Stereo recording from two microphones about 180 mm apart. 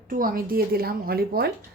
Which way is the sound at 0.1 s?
50° right (ahead or behind).